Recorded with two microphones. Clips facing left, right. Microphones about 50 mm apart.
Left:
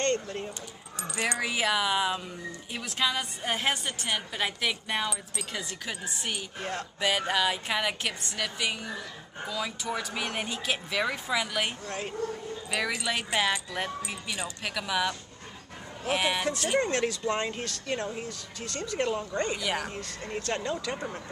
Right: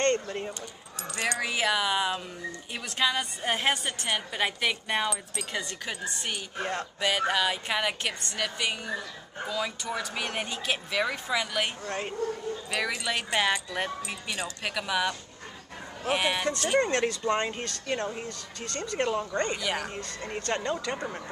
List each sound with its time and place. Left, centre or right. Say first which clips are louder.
0.0 s speech: right 2 dB; centre
1.1 s a woman's voice: even; centre
6.6 s speech: right 4 dB; centre
7.0 s a woman's voice: even; centre
12.7 s a woman's voice: left 1 dB; centre
18.1 s a woman's voice: even; centre